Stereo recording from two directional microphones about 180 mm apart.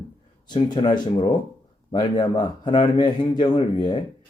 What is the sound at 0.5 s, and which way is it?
Speech, 25° left (ahead or behind).